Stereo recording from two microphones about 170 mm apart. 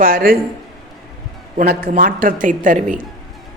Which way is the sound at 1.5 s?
60° right (ahead or behind).